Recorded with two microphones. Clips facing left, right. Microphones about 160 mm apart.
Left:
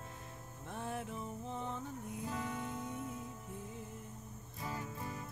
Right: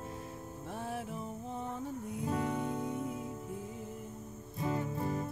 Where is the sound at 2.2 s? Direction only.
35° right (ahead or behind).